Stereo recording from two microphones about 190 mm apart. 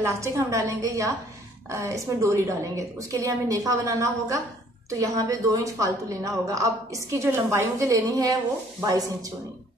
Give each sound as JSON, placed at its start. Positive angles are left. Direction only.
{"t": 0.0, "sound": "a woman's voice", "side_deg": -15}